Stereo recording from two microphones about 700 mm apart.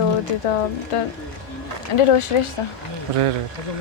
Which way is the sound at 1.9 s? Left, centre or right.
Left.